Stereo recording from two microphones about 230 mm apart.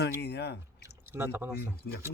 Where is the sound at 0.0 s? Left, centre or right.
Left.